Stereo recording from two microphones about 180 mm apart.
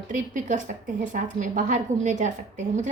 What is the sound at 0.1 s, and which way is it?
A woman's voice, 45° right (ahead or behind).